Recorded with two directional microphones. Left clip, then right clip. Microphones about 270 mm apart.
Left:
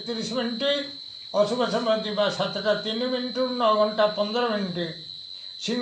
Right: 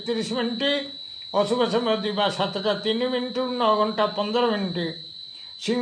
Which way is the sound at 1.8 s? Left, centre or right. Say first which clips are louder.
Even; right.